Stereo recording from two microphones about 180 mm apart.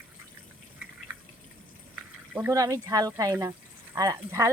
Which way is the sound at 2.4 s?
15° right (ahead or behind).